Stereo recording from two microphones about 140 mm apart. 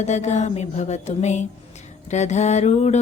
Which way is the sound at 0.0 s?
55° left (ahead or behind).